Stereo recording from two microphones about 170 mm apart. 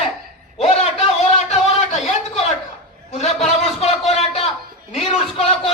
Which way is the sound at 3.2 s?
40° left (ahead or behind).